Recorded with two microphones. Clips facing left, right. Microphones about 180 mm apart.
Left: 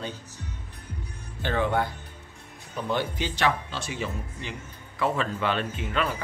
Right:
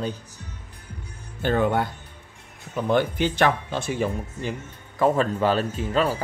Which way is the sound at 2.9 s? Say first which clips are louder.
Right 7 dB; 50° right (ahead or behind).